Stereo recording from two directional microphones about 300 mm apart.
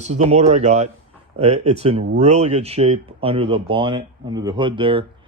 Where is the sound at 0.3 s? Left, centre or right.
Right.